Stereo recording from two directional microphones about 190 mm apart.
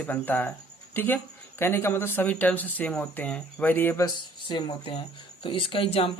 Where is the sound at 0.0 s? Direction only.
10° left (ahead or behind).